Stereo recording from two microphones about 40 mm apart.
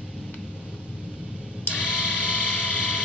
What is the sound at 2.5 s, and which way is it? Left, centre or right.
Vehicle, left.